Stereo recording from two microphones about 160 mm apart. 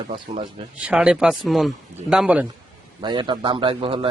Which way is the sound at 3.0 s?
30° right (ahead or behind).